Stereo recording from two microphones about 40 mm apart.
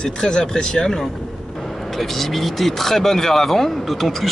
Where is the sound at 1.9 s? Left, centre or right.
Centre.